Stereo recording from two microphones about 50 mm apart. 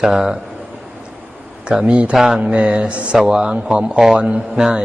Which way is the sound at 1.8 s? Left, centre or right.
Right.